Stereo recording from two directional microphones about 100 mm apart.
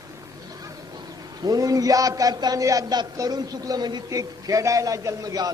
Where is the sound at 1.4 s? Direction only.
35° right (ahead or behind).